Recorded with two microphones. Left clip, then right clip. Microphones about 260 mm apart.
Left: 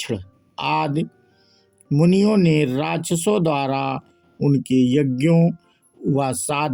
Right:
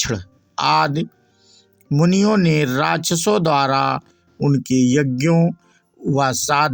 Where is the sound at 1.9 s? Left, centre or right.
Right.